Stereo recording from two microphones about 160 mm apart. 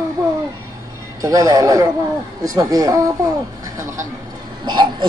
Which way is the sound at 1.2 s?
20° right (ahead or behind).